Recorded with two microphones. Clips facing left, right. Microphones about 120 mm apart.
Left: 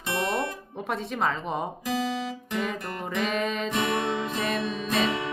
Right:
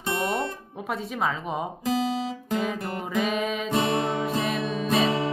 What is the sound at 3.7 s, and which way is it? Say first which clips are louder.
Music: right 5 dB; 30° right (ahead or behind).